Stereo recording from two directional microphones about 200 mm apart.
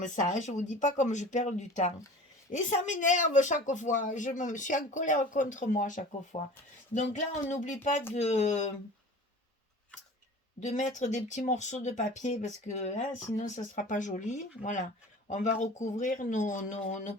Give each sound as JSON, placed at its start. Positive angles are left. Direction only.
{"t": 0.0, "sound": "speech", "side_deg": 40}
{"t": 10.6, "sound": "speech", "side_deg": 35}